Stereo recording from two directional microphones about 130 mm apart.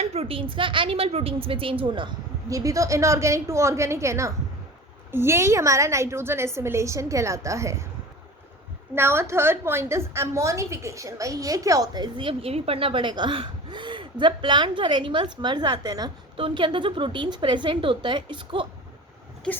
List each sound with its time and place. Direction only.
0.0 s a woman's voice: 50° right (ahead or behind); by 7.9 s 25° right (ahead or behind)
9.0 s a woman's voice: 20° right (ahead or behind); by 18.7 s 40° right (ahead or behind)